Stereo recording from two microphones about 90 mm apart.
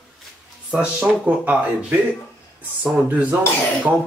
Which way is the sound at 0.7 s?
15° right (ahead or behind).